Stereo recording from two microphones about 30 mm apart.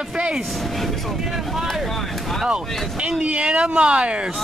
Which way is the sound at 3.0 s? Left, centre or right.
Right.